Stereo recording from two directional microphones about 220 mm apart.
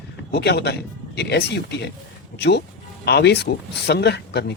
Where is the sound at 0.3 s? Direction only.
50° left (ahead or behind).